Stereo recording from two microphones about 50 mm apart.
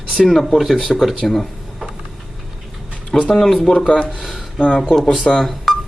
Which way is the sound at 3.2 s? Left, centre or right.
Centre.